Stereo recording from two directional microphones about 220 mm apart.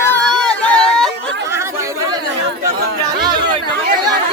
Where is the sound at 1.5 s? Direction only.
10° right (ahead or behind).